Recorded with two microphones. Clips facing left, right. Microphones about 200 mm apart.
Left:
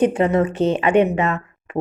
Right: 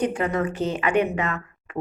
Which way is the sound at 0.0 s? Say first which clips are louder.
Left 7 dB; 25° left (ahead or behind).